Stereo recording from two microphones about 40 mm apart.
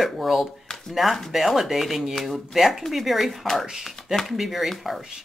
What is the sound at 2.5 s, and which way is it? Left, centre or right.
Speech, centre.